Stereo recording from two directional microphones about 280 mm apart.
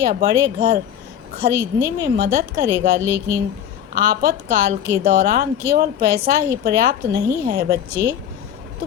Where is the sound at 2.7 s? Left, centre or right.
Centre.